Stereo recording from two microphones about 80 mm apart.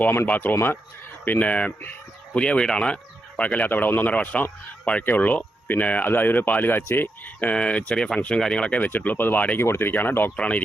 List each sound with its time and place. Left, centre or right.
0.0 s speech: left
7.3 s speech: centre
10.3 s speech: centre